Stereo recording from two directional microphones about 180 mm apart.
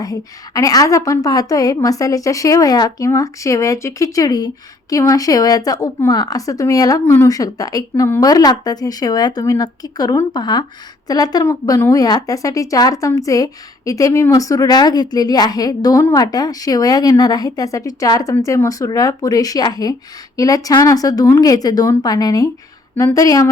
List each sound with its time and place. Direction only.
0.0 s a woman's voice: 20° left (ahead or behind)